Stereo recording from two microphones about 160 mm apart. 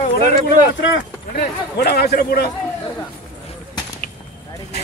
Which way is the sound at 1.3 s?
80° left.